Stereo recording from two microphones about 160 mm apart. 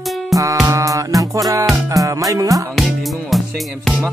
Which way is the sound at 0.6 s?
20° right (ahead or behind).